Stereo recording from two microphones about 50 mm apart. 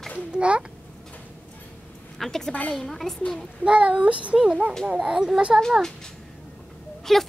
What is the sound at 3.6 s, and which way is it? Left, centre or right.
Speech, right.